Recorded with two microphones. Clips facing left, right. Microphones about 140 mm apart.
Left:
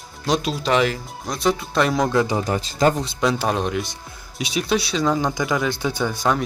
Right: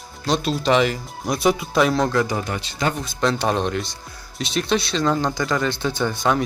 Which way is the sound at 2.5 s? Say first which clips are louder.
Left 5 dB; 40° left (ahead or behind).